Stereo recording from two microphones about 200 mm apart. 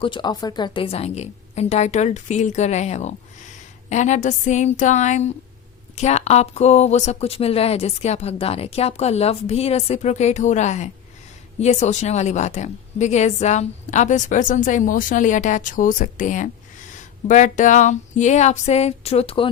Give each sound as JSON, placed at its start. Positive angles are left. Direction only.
{"t": 0.0, "sound": "speech", "side_deg": 25}